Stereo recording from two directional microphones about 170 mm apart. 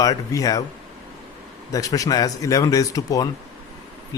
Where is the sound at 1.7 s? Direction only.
20° left (ahead or behind).